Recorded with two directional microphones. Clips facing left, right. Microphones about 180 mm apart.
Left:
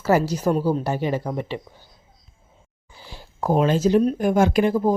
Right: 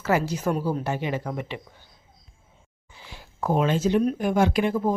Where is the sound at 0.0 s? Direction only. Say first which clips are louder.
Left 4 dB; 40° left (ahead or behind).